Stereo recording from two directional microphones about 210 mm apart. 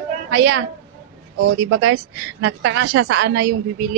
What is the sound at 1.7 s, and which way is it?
A woman's voice, 70° right (ahead or behind).